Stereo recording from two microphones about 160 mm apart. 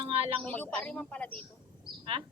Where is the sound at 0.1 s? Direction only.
35° right (ahead or behind).